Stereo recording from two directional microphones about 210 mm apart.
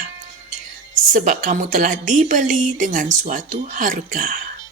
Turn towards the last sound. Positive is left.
turn(degrees=-40)  # may be behind; listen again after turning